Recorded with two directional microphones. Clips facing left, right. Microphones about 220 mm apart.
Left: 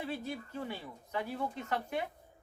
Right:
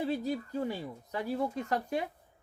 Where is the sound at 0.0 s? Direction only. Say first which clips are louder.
Right 7 dB; 35° right (ahead or behind).